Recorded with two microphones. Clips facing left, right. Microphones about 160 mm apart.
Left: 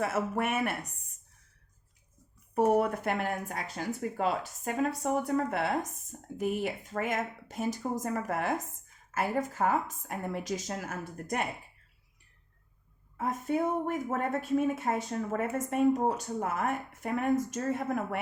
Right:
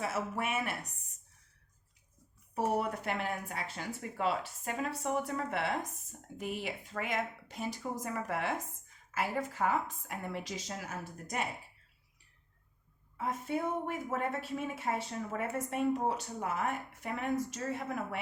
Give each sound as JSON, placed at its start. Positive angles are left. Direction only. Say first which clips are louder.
{"t": 0.0, "sound": "a woman's voice", "louder": "left 5 dB", "side_deg": 55}
{"t": 2.6, "sound": "a woman's voice", "louder": "left 7 dB", "side_deg": 55}
{"t": 13.1, "sound": "a woman's voice", "louder": "left 5 dB", "side_deg": 45}